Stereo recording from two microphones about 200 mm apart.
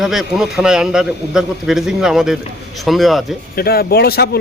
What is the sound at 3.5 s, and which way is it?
Speech, 50° left (ahead or behind).